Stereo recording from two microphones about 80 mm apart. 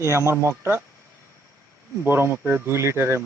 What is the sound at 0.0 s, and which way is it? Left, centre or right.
Speech, right.